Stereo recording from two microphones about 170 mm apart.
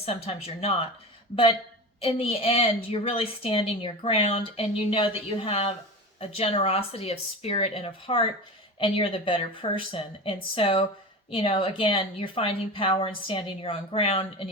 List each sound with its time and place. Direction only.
0.0 s a woman's voice: 35° left (ahead or behind)
2.0 s a woman's voice: 35° left (ahead or behind)